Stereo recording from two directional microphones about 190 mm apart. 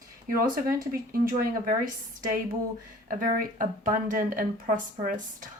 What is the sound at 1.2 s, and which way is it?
Speech, 50° right (ahead or behind).